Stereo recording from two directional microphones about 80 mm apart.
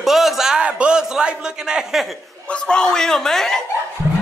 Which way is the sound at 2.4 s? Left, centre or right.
Centre.